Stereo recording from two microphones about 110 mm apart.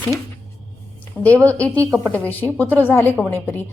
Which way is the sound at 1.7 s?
25° right (ahead or behind).